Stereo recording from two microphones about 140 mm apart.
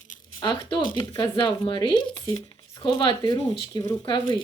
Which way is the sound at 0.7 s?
35° left (ahead or behind).